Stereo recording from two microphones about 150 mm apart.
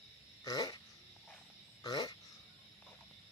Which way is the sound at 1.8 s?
25° left (ahead or behind).